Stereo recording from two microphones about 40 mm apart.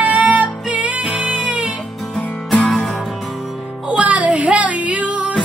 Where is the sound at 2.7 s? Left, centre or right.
Centre.